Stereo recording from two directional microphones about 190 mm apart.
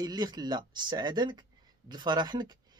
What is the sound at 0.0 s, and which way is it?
A man's voice, 20° right (ahead or behind).